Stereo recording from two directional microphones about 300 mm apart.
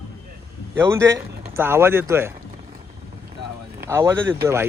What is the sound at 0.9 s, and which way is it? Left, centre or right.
Speech, centre.